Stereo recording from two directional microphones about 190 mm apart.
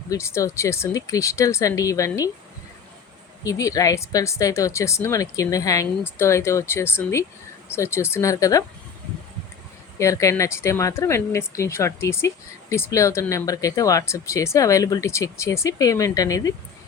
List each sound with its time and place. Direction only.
0.1 s speech: 15° left (ahead or behind)
3.4 s speech: 15° left (ahead or behind)
10.0 s speech: 15° left (ahead or behind)